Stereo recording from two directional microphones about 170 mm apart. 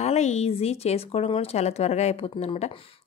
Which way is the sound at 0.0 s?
40° left (ahead or behind).